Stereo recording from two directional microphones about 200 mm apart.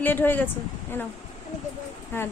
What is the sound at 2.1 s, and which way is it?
Speech, 10° left (ahead or behind).